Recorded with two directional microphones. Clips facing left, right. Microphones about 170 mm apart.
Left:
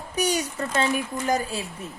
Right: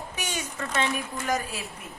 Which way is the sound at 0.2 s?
35° left (ahead or behind).